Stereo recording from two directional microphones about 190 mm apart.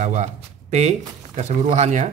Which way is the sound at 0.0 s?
35° right (ahead or behind).